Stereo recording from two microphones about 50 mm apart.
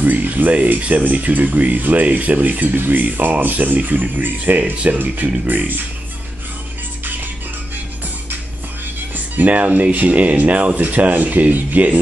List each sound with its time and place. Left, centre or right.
0.0 s speech: right
9.1 s speech: right